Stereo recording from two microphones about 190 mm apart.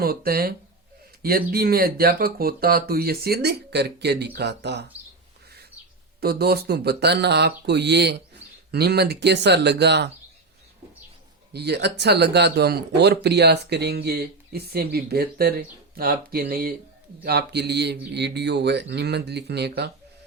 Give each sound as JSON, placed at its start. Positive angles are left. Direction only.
{"t": 0.0, "sound": "speech", "side_deg": -50}
{"t": 6.1, "sound": "speech", "side_deg": -55}
{"t": 11.5, "sound": "speech", "side_deg": -60}